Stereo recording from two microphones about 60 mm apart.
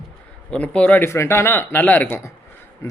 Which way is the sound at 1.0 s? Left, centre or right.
Left.